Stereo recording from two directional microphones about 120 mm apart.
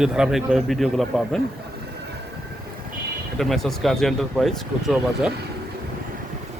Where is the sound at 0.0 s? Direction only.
5° right (ahead or behind).